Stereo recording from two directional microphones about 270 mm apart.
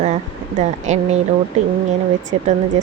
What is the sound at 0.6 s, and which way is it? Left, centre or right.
Speech, right.